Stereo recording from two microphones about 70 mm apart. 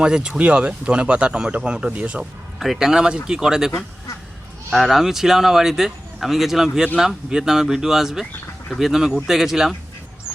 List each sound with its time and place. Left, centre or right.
0.0 s speech: centre
2.6 s speech: centre
4.7 s speech: centre
10.3 s duck: centre